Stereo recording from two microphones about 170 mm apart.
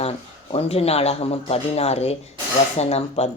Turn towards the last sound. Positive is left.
turn(degrees=40)  # may be behind; listen again after turning